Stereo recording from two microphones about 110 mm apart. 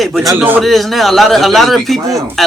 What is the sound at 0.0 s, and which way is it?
Speech, centre (ahead or behind).